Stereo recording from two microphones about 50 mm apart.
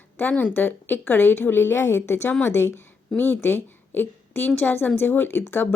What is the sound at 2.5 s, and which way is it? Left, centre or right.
A woman's voice, left.